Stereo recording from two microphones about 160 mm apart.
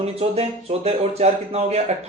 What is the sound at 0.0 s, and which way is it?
Speech, 40° right (ahead or behind).